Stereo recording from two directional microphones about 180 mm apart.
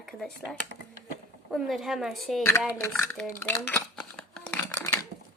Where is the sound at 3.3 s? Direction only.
10° left (ahead or behind).